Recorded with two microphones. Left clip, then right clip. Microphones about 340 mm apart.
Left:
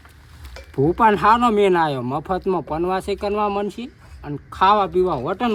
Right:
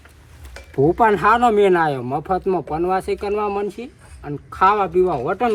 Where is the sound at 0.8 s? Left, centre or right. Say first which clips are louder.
Right 1 dB; centre.